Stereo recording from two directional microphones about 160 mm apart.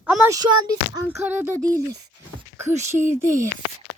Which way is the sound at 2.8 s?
15° right (ahead or behind).